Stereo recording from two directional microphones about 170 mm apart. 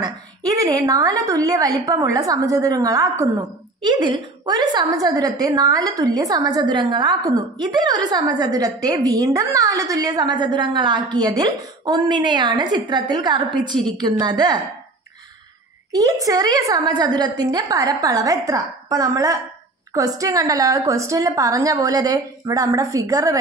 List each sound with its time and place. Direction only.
0.0 s a woman's voice: 20° right (ahead or behind)
15.9 s a woman's voice: 20° right (ahead or behind)